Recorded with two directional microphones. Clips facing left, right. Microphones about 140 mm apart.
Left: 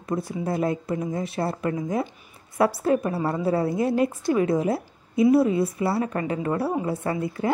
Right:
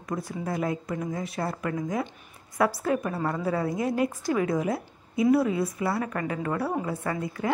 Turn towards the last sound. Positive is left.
turn(degrees=30)  # may be behind; listen again after turning